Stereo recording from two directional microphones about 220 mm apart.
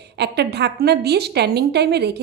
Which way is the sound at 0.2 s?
50° right (ahead or behind).